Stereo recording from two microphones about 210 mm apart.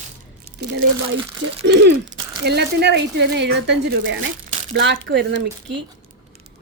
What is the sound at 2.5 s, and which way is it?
Speech, 50° right (ahead or behind).